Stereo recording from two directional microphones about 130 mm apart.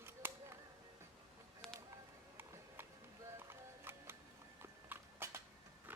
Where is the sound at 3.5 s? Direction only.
20° right (ahead or behind).